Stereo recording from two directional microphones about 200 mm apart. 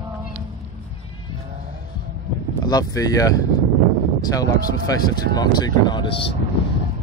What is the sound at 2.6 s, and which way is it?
Speech, 20° left (ahead or behind).